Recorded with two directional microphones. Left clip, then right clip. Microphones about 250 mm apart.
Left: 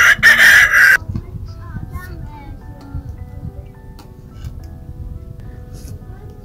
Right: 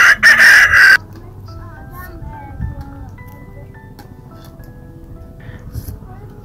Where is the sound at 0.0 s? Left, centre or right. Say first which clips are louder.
Right 1 dB; left.